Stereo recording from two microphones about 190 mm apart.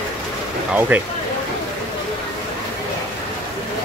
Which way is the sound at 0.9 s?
5° right (ahead or behind).